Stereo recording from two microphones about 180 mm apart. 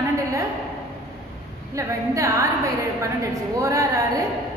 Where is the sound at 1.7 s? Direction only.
15° right (ahead or behind).